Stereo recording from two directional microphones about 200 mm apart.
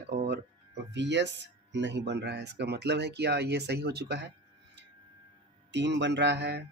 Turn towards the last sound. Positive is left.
turn(degrees=-55)  # may be behind; listen again after turning